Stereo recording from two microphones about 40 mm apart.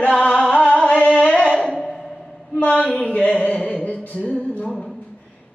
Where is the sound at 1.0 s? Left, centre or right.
Left.